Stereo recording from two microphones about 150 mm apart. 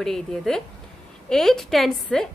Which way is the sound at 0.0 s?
5° left (ahead or behind).